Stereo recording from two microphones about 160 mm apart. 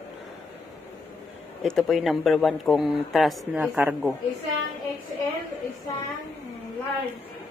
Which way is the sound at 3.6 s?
10° right (ahead or behind).